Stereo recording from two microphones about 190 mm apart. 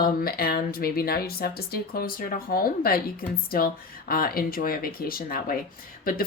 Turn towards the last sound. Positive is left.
turn(degrees=50)  # may be behind; listen again after turning